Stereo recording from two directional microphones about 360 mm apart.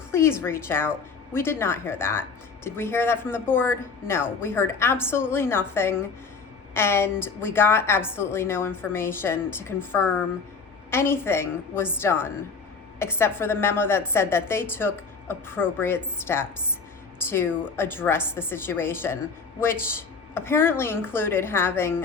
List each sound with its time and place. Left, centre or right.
0.1 s a woman's voice: centre